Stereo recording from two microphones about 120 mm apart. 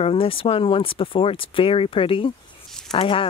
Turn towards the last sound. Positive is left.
turn(degrees=55)  # may be behind; listen again after turning